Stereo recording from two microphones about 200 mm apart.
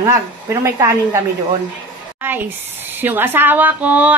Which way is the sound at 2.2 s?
10° right (ahead or behind).